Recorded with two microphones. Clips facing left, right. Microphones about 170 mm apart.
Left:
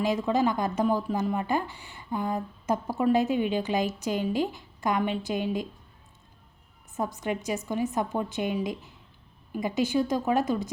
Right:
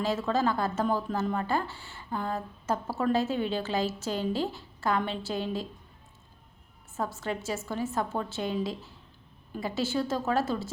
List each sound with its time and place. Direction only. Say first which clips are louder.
0.0 s a woman's voice: left 3 dB; 15° left (ahead or behind)
6.9 s a woman's voice: left 2 dB; 15° left (ahead or behind)